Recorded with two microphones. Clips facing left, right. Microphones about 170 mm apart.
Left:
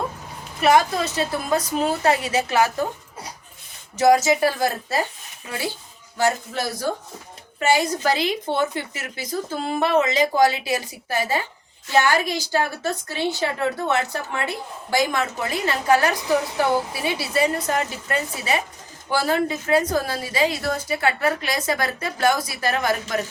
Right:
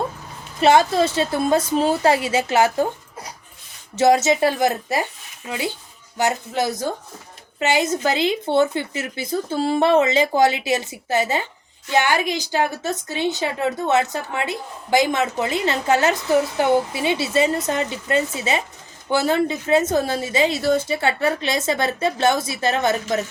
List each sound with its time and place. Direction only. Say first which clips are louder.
0.6 s a woman's voice: right 3 dB; 25° right (ahead or behind)
3.9 s a woman's voice: right 1 dB; 25° right (ahead or behind)
6.1 s a woman's voice: right 1 dB; 20° right (ahead or behind)